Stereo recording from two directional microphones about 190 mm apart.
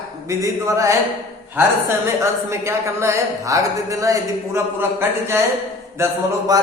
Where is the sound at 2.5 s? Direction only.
15° right (ahead or behind).